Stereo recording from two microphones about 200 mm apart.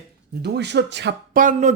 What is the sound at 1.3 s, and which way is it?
Speech, 40° right (ahead or behind).